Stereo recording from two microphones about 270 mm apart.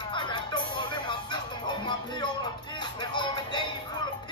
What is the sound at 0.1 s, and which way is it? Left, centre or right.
Music, centre.